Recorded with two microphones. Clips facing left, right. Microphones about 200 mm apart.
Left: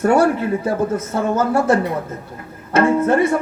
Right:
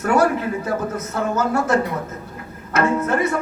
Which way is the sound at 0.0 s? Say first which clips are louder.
Left 3 dB; 30° left (ahead or behind).